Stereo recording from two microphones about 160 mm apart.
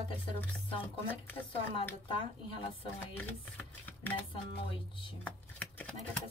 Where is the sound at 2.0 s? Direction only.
35° left (ahead or behind).